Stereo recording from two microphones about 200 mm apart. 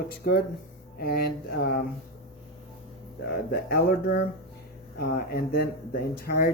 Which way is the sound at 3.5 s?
50° left (ahead or behind).